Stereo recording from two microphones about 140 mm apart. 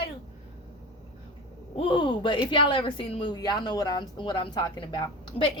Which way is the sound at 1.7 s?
40° left (ahead or behind).